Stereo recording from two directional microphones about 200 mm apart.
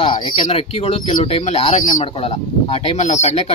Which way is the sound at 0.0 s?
25° left (ahead or behind).